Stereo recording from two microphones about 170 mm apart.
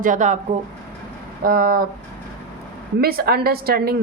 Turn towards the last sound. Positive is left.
turn(degrees=-65)  # may be behind; listen again after turning